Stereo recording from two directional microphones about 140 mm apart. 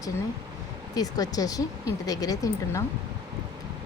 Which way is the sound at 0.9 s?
25° left (ahead or behind).